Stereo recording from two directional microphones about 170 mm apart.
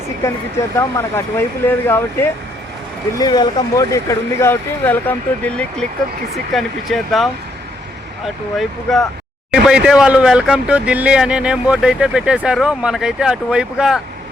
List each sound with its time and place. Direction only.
0.8 s speech: 15° left (ahead or behind)
3.2 s speech: 25° left (ahead or behind); by 7.3 s centre (ahead or behind)
8.5 s speech: centre (ahead or behind)